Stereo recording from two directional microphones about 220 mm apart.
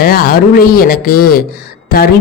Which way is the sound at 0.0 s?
45° left (ahead or behind).